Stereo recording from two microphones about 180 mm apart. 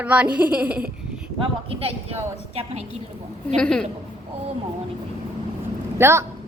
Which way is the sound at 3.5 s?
5° left (ahead or behind).